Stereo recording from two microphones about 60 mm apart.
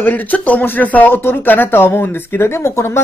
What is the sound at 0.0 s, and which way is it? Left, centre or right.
Speech, left.